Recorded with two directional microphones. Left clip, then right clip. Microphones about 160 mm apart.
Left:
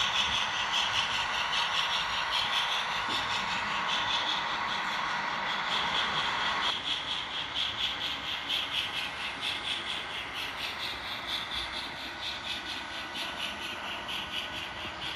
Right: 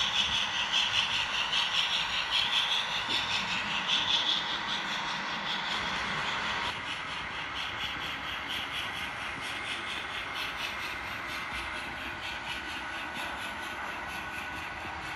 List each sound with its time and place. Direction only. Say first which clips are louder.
0.0 s vehicle: even; centre (ahead or behind)